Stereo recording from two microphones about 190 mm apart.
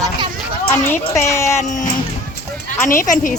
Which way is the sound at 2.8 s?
45° left (ahead or behind).